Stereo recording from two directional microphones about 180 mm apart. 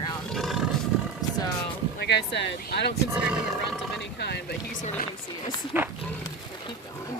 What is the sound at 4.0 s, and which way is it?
Speech, 70° left (ahead or behind).